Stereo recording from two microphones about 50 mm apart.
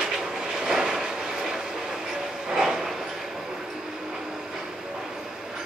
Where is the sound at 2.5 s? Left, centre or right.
Centre.